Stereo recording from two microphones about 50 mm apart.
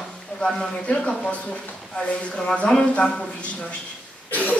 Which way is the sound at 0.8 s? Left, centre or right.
Centre.